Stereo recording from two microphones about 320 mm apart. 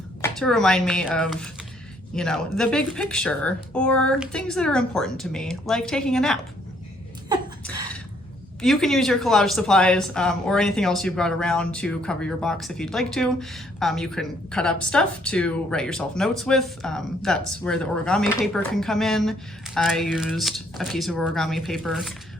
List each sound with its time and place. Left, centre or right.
0.2 s speech: centre
7.3 s a sound: centre
8.6 s speech: centre